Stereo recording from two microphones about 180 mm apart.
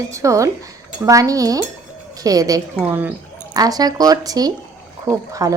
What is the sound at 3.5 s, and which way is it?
Speech, 20° right (ahead or behind).